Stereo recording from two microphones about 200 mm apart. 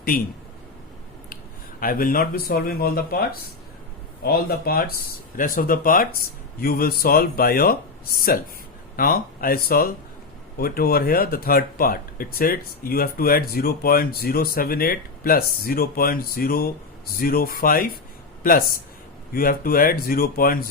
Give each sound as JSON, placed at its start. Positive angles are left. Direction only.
{"t": 0.1, "sound": "speech", "side_deg": 45}
{"t": 1.8, "sound": "speech", "side_deg": 45}
{"t": 19.3, "sound": "speech", "side_deg": 45}